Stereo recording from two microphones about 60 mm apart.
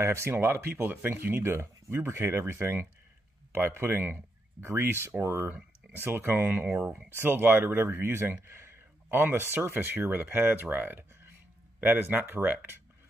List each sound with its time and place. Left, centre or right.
0.0 s speech: right